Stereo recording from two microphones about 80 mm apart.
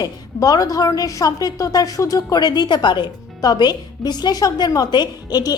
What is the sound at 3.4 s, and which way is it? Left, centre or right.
A woman's voice, left.